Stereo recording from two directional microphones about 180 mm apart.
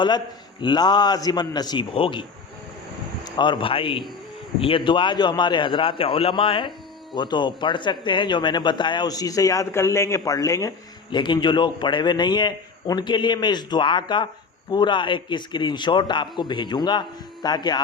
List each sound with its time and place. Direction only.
0.6 s speech: 25° left (ahead or behind)
3.2 s speech: 25° left (ahead or behind)